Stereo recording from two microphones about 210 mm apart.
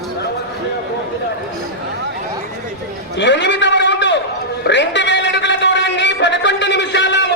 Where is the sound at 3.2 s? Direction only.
55° left (ahead or behind).